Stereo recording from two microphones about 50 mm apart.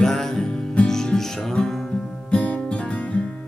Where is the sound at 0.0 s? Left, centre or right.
Centre.